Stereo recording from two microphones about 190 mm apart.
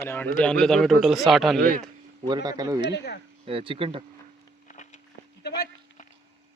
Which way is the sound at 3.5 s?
30° right (ahead or behind).